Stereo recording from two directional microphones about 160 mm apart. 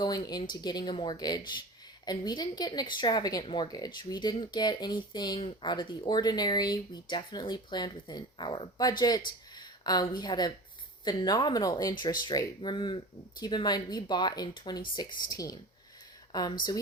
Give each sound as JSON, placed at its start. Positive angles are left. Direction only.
{"t": 0.0, "sound": "speech", "side_deg": 25}